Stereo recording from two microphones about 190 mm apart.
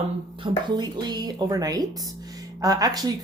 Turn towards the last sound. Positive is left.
turn(degrees=-20)  # may be behind; listen again after turning